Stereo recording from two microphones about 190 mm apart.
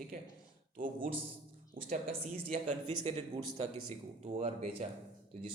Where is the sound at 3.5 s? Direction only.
30° right (ahead or behind).